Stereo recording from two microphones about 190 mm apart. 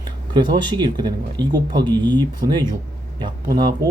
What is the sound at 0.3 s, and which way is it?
Speech, 25° right (ahead or behind).